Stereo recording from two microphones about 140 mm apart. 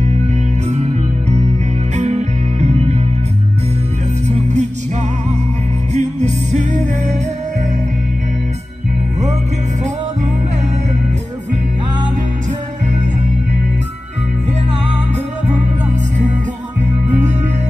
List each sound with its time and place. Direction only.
2.0 s music: 55° right (ahead or behind)
4.3 s music: 55° right (ahead or behind)
5.9 s music: 55° right (ahead or behind)